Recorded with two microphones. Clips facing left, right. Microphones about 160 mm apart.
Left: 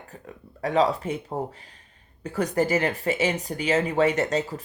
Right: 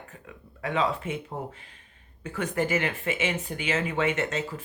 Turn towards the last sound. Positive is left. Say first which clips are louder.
# left 4 dB
turn(degrees=35)  # may be behind; listen again after turning